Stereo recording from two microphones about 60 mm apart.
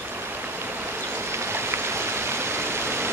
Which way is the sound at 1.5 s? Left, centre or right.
Right.